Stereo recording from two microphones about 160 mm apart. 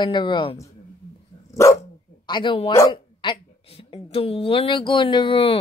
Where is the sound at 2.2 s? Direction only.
30° left (ahead or behind).